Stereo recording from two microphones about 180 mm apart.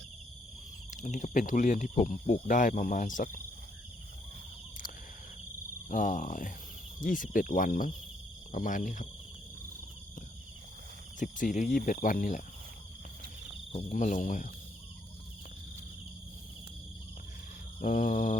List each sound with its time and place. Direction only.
1.0 s speech: 45° left (ahead or behind)
5.9 s speech: 45° left (ahead or behind)
11.2 s speech: 45° left (ahead or behind)
13.7 s speech: 45° left (ahead or behind)
17.7 s speech: 45° left (ahead or behind)